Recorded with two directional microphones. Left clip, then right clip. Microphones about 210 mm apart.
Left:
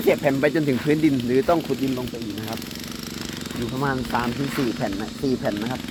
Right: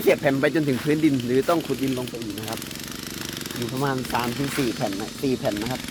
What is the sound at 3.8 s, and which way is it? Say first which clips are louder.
Speech: left 1 dB; 5° right (ahead or behind).